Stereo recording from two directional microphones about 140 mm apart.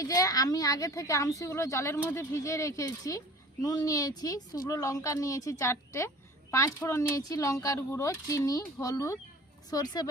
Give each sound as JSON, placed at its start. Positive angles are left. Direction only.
{"t": 0.0, "sound": "speech", "side_deg": 25}